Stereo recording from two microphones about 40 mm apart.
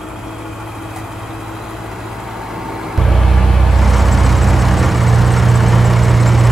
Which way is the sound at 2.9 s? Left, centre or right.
Centre.